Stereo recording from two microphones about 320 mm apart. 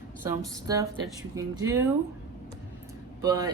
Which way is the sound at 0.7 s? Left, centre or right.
Centre.